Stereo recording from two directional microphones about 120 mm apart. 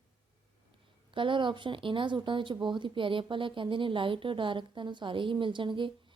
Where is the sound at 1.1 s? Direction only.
45° right (ahead or behind).